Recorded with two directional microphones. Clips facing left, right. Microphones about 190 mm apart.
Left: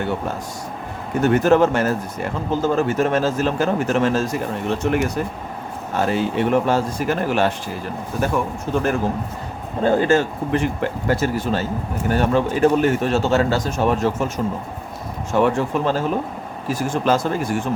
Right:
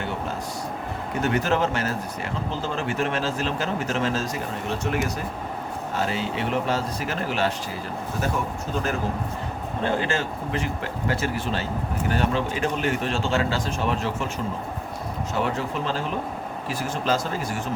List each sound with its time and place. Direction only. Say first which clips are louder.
1.2 s speech: left 8 dB; 50° left (ahead or behind)
9.8 s speech: left 9 dB; 45° left (ahead or behind)